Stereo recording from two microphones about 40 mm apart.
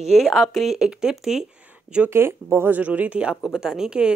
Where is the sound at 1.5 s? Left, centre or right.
Right.